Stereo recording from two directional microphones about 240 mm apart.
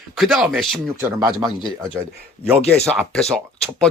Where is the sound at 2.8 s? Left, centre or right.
Centre.